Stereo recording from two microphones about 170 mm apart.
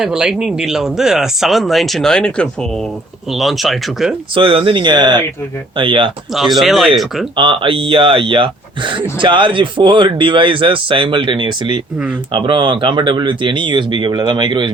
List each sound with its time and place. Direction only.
0.0 s speech: 5° right (ahead or behind)
4.4 s speech: 30° right (ahead or behind)
6.6 s speech: centre (ahead or behind)
7.3 s speech: 30° right (ahead or behind)